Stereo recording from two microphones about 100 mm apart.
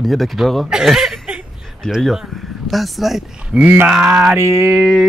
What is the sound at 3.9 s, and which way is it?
Speech, 5° right (ahead or behind).